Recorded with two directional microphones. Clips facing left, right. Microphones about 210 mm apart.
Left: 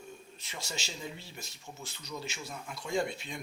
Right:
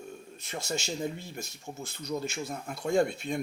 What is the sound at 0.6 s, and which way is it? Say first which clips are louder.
Speech: right 9 dB; 50° right (ahead or behind).